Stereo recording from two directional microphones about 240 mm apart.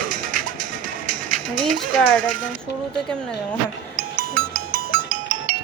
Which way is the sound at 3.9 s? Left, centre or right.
Right.